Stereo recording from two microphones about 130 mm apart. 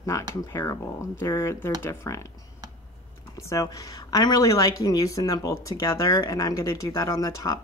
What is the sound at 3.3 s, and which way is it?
Speech, 25° left (ahead or behind).